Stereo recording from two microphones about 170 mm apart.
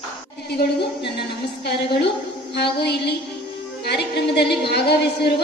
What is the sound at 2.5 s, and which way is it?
A woman's voice, 75° left (ahead or behind).